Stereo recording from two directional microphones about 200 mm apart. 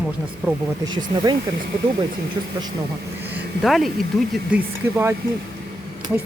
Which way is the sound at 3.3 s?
Centre (ahead or behind).